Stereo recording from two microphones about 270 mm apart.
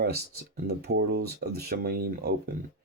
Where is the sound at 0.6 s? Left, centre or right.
Right.